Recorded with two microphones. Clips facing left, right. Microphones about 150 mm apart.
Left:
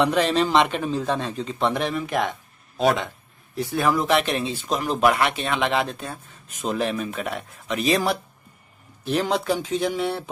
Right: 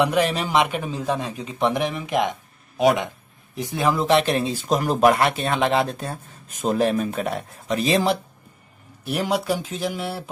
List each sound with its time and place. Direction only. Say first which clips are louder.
0.0 s a man's voice: left 1 dB; 10° right (ahead or behind)
9.0 s speech: left 1 dB; 10° right (ahead or behind)